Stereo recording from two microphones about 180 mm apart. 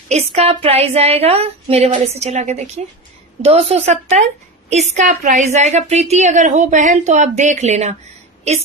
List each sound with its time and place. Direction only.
0.1 s a woman's voice: 35° right (ahead or behind)